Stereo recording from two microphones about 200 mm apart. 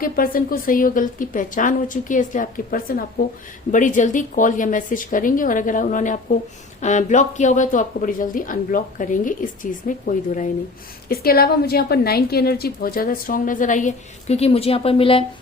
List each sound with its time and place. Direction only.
0.0 s a woman's voice: 45° left (ahead or behind); by 15.2 s 30° left (ahead or behind)